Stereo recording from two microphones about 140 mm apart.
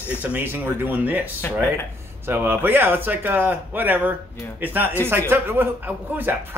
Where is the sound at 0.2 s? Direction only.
15° right (ahead or behind).